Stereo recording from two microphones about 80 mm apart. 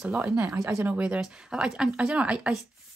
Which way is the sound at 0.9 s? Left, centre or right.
Centre.